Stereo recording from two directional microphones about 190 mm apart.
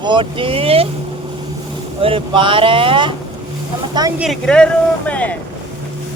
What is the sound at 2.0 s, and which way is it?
Speech, 30° right (ahead or behind).